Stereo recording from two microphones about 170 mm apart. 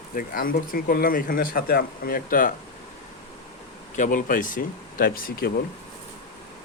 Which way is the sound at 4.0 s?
55° left (ahead or behind).